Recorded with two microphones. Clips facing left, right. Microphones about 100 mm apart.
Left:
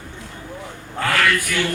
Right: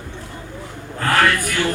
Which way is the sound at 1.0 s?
40° right (ahead or behind).